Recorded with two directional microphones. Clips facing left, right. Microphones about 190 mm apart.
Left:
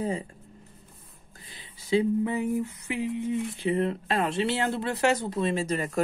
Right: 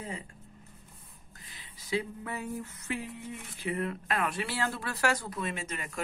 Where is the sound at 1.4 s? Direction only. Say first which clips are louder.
Left 4 dB; 25° left (ahead or behind).